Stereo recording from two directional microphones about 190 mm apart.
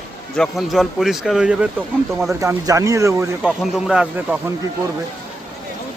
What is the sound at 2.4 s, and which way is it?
A man's voice, 15° right (ahead or behind).